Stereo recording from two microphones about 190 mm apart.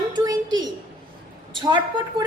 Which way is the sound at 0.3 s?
20° right (ahead or behind).